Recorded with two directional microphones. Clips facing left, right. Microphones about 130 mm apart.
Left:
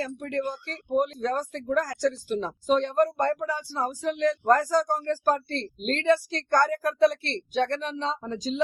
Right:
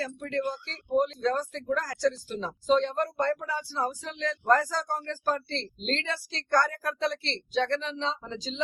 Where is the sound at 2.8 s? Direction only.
50° left (ahead or behind).